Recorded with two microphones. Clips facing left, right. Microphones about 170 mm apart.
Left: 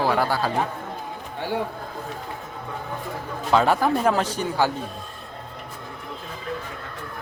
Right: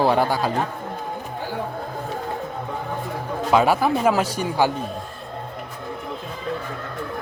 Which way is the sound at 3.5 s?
10° right (ahead or behind).